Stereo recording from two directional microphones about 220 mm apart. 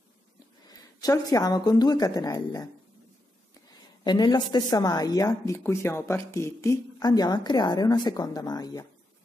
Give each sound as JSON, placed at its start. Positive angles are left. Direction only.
{"t": 1.0, "sound": "speech", "side_deg": 15}
{"t": 4.0, "sound": "speech", "side_deg": 20}